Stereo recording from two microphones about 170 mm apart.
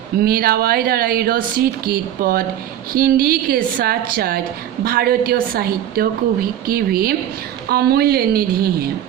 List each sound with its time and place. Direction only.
0.2 s speech: 60° right (ahead or behind)